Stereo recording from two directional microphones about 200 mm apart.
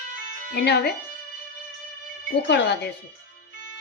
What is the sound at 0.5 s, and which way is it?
Speech, 55° left (ahead or behind).